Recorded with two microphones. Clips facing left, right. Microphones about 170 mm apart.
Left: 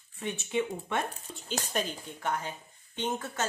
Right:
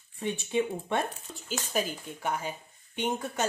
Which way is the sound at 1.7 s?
5° right (ahead or behind).